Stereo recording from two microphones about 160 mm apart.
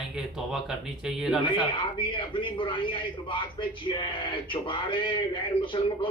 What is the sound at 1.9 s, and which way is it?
A man's voice, 30° left (ahead or behind).